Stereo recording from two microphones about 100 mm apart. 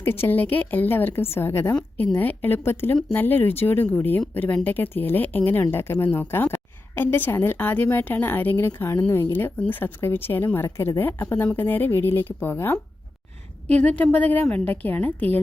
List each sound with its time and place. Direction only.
0.0 s a woman's voice: 25° left (ahead or behind)
14.7 s a woman's voice: 20° left (ahead or behind)